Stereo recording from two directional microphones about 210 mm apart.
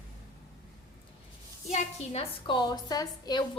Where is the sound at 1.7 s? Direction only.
30° left (ahead or behind).